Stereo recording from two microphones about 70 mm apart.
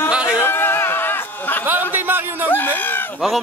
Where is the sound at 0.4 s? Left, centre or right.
Left.